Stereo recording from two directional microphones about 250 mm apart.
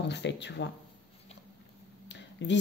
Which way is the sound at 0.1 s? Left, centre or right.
Left.